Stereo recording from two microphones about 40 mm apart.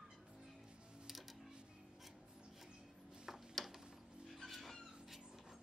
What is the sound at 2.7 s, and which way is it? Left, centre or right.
Music, right.